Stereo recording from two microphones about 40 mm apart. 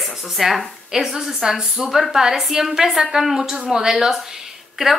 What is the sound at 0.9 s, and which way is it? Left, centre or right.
A woman's voice, centre.